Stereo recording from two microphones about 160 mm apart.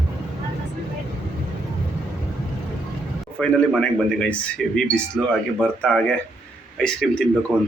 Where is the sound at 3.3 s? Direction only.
5° left (ahead or behind).